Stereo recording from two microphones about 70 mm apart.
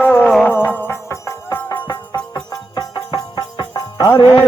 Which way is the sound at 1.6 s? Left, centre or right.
Left.